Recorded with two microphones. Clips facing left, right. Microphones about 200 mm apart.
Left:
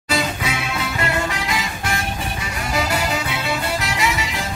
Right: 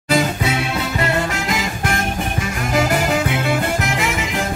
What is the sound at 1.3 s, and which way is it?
Music, 45° right (ahead or behind).